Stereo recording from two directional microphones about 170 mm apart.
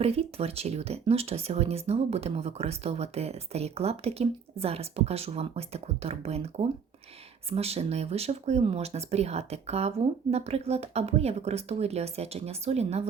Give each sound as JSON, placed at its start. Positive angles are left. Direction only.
{"t": 0.0, "sound": "speech", "side_deg": -35}